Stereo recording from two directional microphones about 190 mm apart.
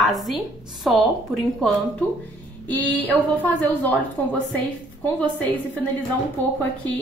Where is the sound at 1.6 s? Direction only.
Centre (ahead or behind).